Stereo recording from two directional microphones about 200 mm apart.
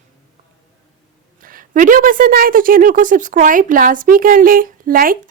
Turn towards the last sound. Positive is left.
turn(degrees=-45)  # may be behind; listen again after turning